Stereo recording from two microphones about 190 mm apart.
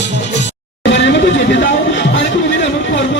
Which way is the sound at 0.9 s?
65° left (ahead or behind).